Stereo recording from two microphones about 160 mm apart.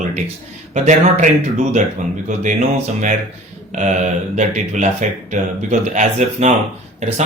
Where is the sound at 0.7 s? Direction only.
45° right (ahead or behind).